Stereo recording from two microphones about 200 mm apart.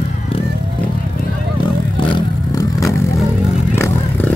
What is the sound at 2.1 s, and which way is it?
Vehicle, 20° left (ahead or behind).